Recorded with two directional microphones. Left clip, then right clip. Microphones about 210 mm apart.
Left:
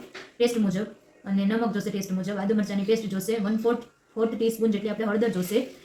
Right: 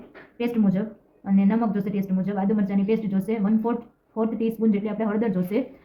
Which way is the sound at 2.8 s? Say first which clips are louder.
Left 3 dB; 25° right (ahead or behind).